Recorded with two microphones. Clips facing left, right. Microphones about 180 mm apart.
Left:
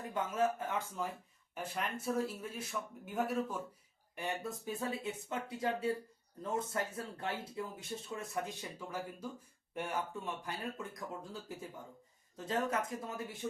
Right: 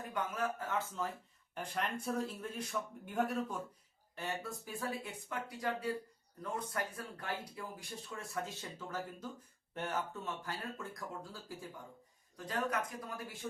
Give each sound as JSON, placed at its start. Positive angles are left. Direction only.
{"t": 0.1, "sound": "speech", "side_deg": 25}
{"t": 1.5, "sound": "speech", "side_deg": 5}
{"t": 4.1, "sound": "speech", "side_deg": 15}